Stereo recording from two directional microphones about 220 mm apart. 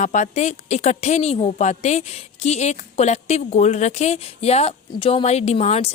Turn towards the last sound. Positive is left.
turn(degrees=30)  # may be behind; listen again after turning